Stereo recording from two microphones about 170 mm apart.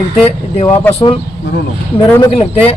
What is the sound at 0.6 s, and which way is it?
Speech, 35° left (ahead or behind).